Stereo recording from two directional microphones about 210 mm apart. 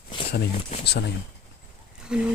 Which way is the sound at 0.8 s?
50° left (ahead or behind).